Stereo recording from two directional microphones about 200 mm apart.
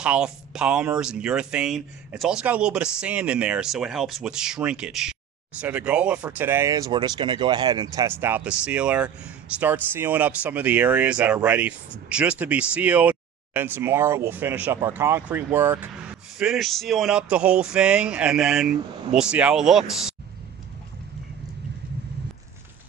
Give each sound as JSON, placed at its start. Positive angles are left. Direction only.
{"t": 0.0, "sound": "speech", "side_deg": -5}